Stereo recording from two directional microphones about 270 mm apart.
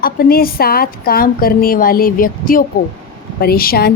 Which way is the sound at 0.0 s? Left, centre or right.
Left.